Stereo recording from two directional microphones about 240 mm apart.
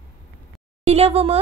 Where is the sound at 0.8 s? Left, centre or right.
Right.